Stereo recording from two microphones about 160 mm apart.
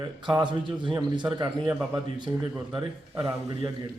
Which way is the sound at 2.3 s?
15° right (ahead or behind).